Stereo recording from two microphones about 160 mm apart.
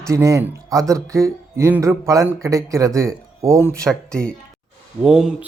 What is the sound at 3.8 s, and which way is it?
Speech, 5° left (ahead or behind).